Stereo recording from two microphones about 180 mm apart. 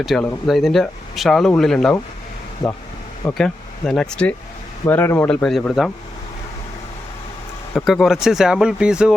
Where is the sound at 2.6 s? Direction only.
25° left (ahead or behind).